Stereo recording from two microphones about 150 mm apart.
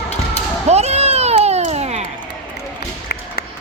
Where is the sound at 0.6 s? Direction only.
45° right (ahead or behind).